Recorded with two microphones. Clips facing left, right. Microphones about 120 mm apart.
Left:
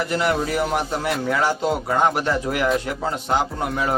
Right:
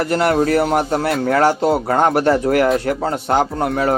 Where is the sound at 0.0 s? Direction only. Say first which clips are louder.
Right 6 dB; 50° right (ahead or behind).